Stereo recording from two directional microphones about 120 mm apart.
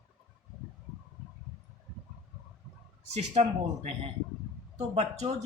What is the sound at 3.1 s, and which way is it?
Speech, 65° right (ahead or behind).